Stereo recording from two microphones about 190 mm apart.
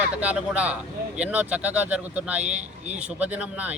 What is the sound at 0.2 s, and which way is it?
A man's voice, 5° right (ahead or behind).